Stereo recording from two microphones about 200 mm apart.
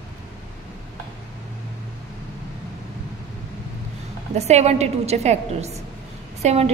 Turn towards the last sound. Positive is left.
turn(degrees=-30)  # may be behind; listen again after turning